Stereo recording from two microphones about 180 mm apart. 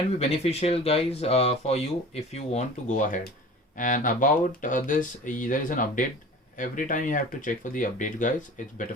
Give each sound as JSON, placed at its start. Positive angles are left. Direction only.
{"t": 0.2, "sound": "speech", "side_deg": 35}